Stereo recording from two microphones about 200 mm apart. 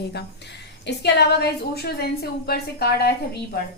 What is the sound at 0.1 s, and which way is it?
A woman's voice, 55° left (ahead or behind).